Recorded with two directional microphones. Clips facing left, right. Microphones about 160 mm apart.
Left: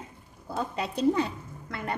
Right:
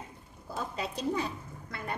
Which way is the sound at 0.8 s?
60° left (ahead or behind).